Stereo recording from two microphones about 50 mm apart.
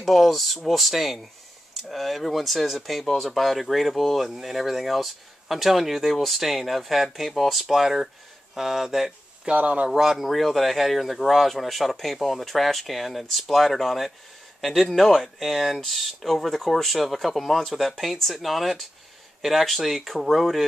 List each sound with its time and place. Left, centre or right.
0.0 s speech: centre
9.4 s speech: right
9.8 s speech: centre